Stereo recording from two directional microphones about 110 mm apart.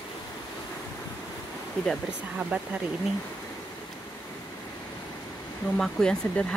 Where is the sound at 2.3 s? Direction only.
10° right (ahead or behind).